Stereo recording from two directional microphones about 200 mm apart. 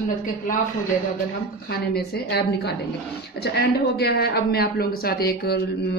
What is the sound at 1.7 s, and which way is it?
Speech, 50° left (ahead or behind).